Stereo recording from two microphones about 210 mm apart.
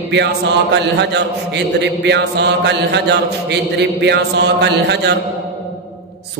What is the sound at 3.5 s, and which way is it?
A man's voice, 55° right (ahead or behind).